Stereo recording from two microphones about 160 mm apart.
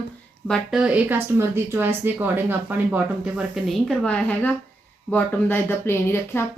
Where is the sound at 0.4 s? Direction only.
Centre (ahead or behind).